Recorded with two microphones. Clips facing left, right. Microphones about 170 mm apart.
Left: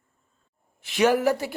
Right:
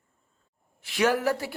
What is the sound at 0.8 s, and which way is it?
Speech, 20° left (ahead or behind).